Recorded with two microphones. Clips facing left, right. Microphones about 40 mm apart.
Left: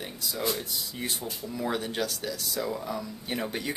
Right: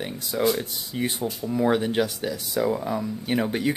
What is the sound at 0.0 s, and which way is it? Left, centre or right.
Speech, right.